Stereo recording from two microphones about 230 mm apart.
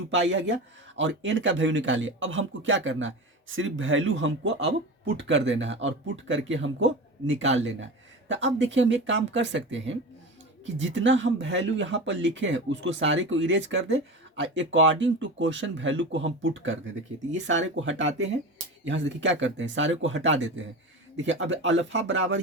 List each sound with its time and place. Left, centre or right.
0.1 s speech: right